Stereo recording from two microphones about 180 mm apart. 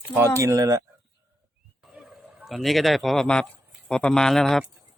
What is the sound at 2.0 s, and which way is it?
Speech, 5° right (ahead or behind).